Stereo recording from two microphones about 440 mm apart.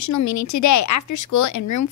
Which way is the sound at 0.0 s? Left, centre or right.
Left.